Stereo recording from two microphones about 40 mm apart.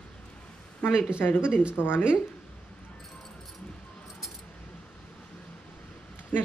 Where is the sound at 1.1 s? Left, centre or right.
Left.